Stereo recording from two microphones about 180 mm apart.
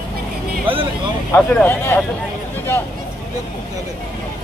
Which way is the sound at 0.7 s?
30° right (ahead or behind).